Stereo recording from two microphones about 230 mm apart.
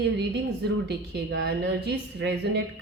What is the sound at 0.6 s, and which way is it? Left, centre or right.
A woman's voice, right.